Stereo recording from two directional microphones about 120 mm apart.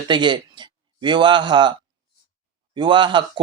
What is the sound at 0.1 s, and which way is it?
Speech, 40° right (ahead or behind).